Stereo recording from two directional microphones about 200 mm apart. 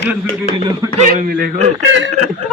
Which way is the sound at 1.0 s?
40° right (ahead or behind).